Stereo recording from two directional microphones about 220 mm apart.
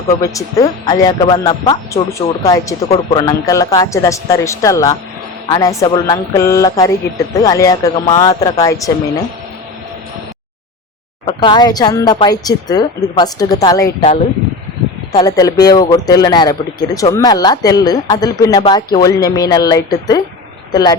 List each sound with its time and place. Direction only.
0.1 s speech: 15° left (ahead or behind)
11.3 s speech: 20° left (ahead or behind)
15.1 s speech: 15° left (ahead or behind)